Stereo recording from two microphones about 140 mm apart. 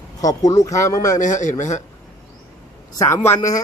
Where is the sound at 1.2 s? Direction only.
65° left (ahead or behind).